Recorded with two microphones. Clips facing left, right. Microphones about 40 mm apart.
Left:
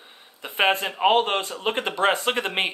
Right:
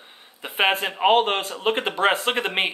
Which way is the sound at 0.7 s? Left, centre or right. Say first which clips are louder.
Right 2 dB; centre.